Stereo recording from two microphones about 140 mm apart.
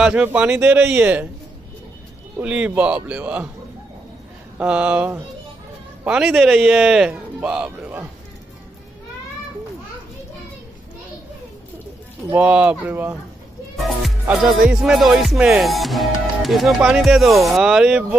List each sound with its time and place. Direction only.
0.0 s speech: 10° right (ahead or behind)
2.3 s speech: 10° right (ahead or behind)
4.6 s speech: 10° right (ahead or behind)
6.0 s music: 5° right (ahead or behind)
12.3 s speech: 10° right (ahead or behind)
14.2 s music: 10° right (ahead or behind)